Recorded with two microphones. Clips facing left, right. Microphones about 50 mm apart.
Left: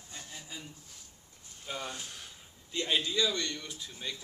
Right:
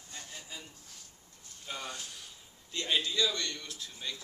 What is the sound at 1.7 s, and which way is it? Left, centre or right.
Speech, centre.